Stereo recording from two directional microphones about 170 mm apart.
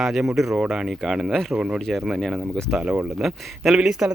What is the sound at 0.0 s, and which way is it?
Speech, centre (ahead or behind).